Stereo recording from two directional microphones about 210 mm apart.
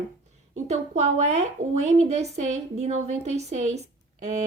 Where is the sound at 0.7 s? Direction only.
30° right (ahead or behind).